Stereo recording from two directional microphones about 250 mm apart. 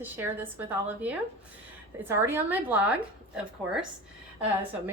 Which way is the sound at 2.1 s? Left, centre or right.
Centre.